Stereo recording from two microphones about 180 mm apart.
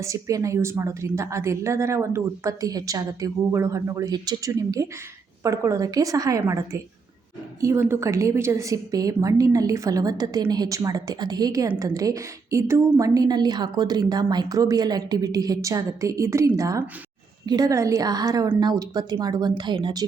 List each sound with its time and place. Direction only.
0.0 s a woman's voice: 15° right (ahead or behind)